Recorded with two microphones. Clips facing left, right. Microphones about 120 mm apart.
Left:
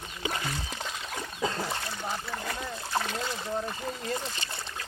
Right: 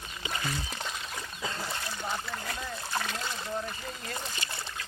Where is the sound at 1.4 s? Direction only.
40° left (ahead or behind).